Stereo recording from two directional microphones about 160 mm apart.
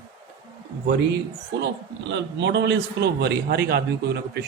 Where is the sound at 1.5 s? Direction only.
90° right.